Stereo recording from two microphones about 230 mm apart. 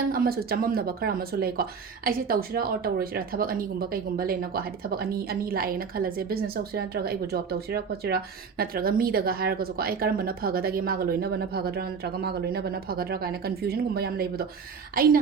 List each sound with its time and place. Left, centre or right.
0.1 s speech: right